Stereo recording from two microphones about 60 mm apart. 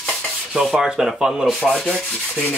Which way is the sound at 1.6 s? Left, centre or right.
Centre.